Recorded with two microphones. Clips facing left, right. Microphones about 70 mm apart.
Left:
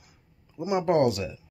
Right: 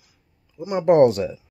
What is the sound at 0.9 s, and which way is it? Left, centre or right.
Speech, right.